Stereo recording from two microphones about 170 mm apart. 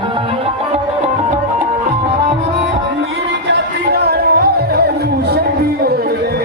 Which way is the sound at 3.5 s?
70° right (ahead or behind).